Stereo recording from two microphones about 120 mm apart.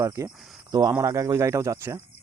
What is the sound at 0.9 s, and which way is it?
Speech, 25° right (ahead or behind).